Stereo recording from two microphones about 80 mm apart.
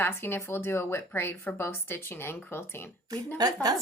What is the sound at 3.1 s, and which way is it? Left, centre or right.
Speech, right.